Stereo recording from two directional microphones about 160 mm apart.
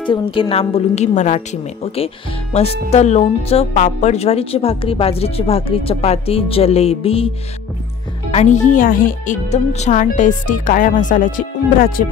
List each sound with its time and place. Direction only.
0.1 s speech: 35° left (ahead or behind)
8.3 s speech: 45° left (ahead or behind)